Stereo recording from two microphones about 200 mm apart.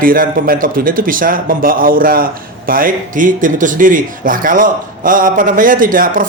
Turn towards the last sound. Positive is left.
turn(degrees=-45)  # may be behind; listen again after turning